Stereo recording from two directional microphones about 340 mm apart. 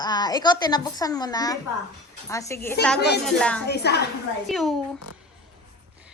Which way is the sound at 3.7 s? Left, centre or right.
Left.